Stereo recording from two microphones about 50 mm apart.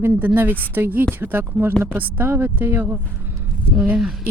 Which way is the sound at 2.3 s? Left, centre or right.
Right.